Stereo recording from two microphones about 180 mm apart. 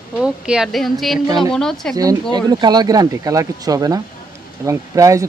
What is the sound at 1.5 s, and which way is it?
Speech, 5° left (ahead or behind).